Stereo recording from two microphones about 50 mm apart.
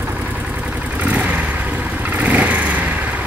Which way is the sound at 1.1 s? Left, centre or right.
Right.